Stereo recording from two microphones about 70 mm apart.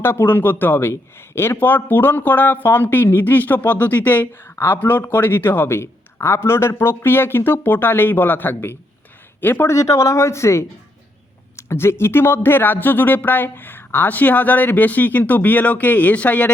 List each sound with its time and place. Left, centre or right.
0.0 s a man's voice: left
9.7 s speech: left; by 16.5 s centre